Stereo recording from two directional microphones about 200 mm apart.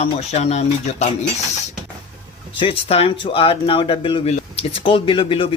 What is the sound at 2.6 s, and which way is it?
Speech, 30° left (ahead or behind).